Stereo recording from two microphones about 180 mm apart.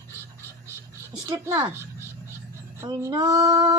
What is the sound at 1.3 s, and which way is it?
Speech, 20° right (ahead or behind).